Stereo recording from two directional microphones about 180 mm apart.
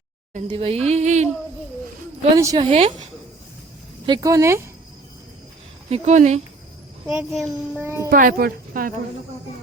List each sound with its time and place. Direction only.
0.3 s speech: 35° right (ahead or behind)
2.3 s a woman's voice: 20° right (ahead or behind)
2.6 s speech: 35° right (ahead or behind)
4.0 s a child's voice: 20° right (ahead or behind)
5.9 s speech: 40° right (ahead or behind)
7.1 s a child's voice: 5° right (ahead or behind)
8.1 s speech: 50° right (ahead or behind)